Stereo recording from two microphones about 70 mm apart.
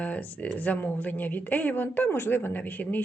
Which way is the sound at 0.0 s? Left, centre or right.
Left.